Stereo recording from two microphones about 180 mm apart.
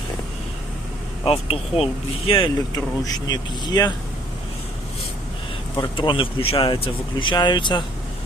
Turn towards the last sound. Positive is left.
turn(degrees=25)  # may be behind; listen again after turning